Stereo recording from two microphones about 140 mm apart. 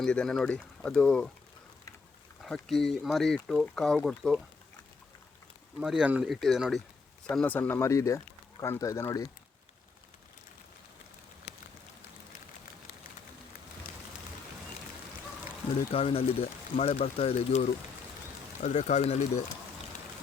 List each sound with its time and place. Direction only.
0.0 s speech: 5° left (ahead or behind)
2.4 s speech: centre (ahead or behind)
5.8 s speech: 5° right (ahead or behind); by 9.2 s 20° left (ahead or behind)
15.9 s speech: 45° left (ahead or behind)